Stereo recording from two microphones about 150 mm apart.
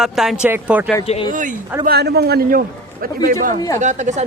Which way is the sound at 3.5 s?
25° left (ahead or behind).